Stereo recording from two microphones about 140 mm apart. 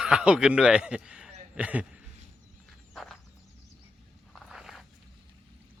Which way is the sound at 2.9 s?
Centre (ahead or behind).